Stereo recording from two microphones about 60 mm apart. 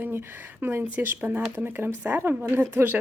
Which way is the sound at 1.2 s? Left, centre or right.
Right.